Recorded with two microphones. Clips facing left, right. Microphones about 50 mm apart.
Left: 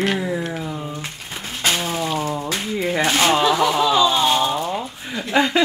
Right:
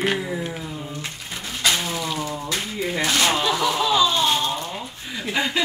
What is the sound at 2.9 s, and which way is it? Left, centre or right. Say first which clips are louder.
Speech: left 4 dB; left.